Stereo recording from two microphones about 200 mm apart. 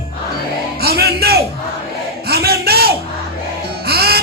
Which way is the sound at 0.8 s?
50° right (ahead or behind).